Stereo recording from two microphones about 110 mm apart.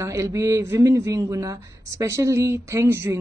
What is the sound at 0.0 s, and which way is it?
Speech, 30° right (ahead or behind).